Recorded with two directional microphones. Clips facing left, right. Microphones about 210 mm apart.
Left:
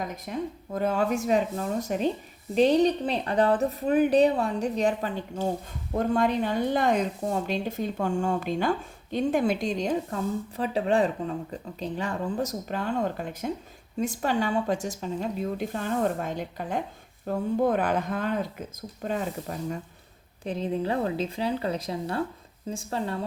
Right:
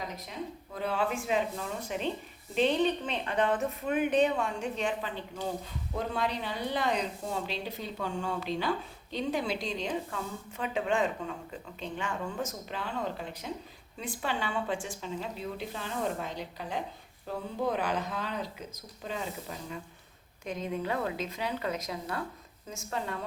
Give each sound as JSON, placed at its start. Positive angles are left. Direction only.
{"t": 0.0, "sound": "a woman's voice", "side_deg": 50}
{"t": 20.4, "sound": "a woman's voice", "side_deg": 30}